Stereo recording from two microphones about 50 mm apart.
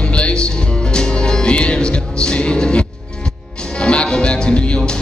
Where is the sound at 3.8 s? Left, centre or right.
Left.